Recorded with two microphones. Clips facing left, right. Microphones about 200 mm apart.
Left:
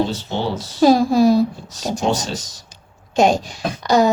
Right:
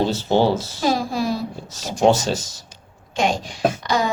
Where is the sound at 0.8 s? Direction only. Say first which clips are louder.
Left 13 dB; 40° left (ahead or behind).